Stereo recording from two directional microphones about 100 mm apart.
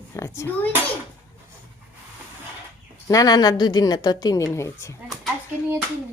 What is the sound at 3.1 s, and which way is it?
A woman's voice, 40° left (ahead or behind).